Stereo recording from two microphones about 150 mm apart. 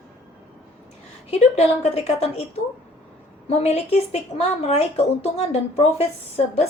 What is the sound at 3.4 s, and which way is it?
Speech, 45° left (ahead or behind).